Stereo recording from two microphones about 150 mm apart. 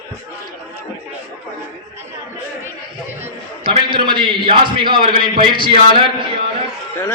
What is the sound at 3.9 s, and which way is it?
A man's voice, 35° right (ahead or behind).